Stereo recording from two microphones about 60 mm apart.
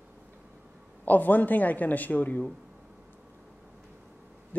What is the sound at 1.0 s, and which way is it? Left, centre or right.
Speech, left.